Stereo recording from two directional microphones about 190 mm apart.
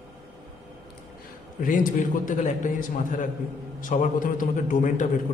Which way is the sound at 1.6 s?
45° left (ahead or behind).